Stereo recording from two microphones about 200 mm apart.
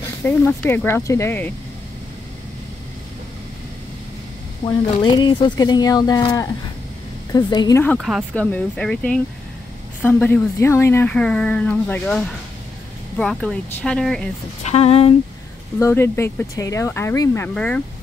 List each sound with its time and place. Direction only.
0.2 s speech: 10° left (ahead or behind)
4.6 s speech: 25° left (ahead or behind)
8.0 s speech: centre (ahead or behind)
14.6 s speech: 30° left (ahead or behind)
15.8 s speech: 10° left (ahead or behind)